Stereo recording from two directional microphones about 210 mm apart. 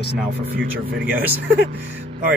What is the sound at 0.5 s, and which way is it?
Speech, 45° right (ahead or behind).